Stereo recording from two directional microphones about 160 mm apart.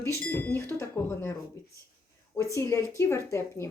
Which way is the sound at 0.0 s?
15° left (ahead or behind).